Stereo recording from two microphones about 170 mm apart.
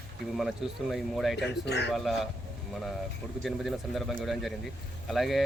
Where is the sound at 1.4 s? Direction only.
85° left.